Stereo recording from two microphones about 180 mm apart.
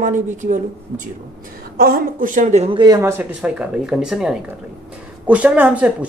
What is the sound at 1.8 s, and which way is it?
A woman's voice, 55° right (ahead or behind).